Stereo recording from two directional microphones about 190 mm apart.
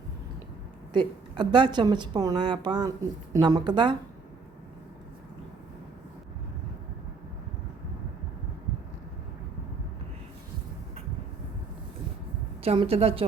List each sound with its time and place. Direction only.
0.9 s a woman's voice: 25° right (ahead or behind)
12.6 s a woman's voice: 30° right (ahead or behind)